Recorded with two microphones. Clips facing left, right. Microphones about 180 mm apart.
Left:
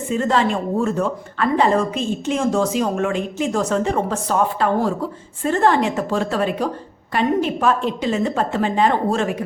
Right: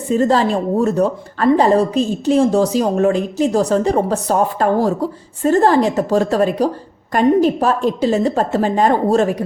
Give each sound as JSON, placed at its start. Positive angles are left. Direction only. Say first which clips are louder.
{"t": 0.1, "sound": "a woman's voice", "louder": "right 5 dB", "side_deg": -35}